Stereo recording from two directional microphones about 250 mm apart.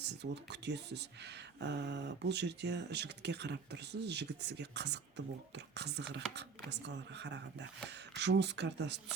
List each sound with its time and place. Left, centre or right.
0.0 s speech: right